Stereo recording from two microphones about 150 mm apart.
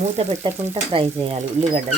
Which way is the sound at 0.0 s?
45° right (ahead or behind).